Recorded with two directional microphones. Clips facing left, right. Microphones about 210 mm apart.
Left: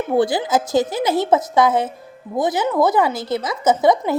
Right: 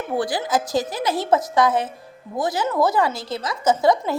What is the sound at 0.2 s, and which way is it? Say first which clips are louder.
Speech: left 5 dB; 25° left (ahead or behind).